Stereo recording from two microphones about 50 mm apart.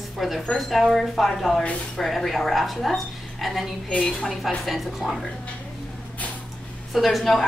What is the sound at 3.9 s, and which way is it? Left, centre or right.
Speech, centre.